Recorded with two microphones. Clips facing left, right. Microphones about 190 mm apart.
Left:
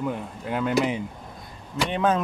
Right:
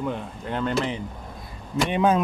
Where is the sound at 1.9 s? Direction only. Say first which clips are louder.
Right 2 dB; 15° right (ahead or behind).